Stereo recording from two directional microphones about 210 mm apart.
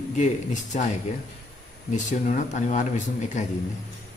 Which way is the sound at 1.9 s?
35° left (ahead or behind).